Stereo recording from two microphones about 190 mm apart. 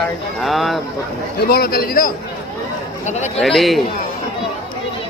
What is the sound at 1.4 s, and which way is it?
Speech, 55° left (ahead or behind).